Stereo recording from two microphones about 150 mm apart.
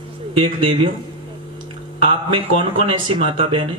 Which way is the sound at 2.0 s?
35° right (ahead or behind).